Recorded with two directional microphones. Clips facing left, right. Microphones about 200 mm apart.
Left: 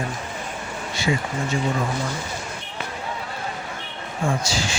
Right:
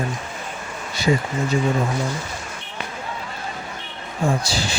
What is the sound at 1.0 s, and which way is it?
Speech, 40° right (ahead or behind).